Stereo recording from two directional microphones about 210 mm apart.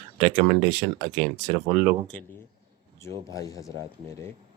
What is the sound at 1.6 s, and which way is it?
Speech, 10° right (ahead or behind).